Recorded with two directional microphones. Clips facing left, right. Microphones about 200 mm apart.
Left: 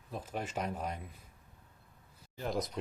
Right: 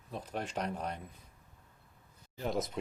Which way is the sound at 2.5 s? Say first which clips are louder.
Right 1 dB; centre (ahead or behind).